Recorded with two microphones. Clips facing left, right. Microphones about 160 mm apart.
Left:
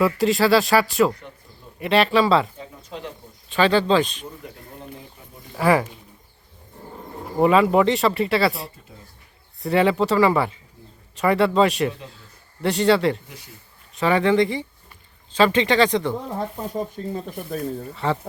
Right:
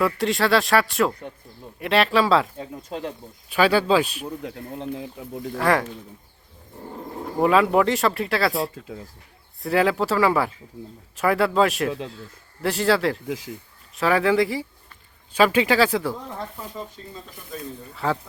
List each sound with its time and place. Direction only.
0.0 s speech: centre (ahead or behind)
3.5 s speech: 10° right (ahead or behind)
5.2 s speech: 90° right
5.5 s speech: 5° left (ahead or behind)
7.3 s speech: centre (ahead or behind)
8.7 s speech: 90° right
9.6 s speech: centre (ahead or behind)
13.2 s speech: 90° right
13.9 s speech: centre (ahead or behind)
16.6 s speech: 50° left (ahead or behind)
17.9 s speech: centre (ahead or behind)